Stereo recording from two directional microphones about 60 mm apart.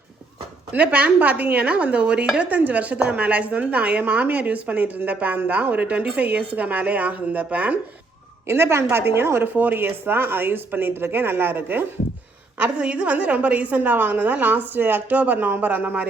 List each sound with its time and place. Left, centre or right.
0.7 s speech: right
8.4 s a woman's voice: right
9.5 s speech: right
12.5 s speech: centre